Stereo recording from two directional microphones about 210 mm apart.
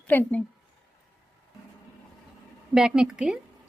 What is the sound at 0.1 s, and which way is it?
Speech, 10° left (ahead or behind).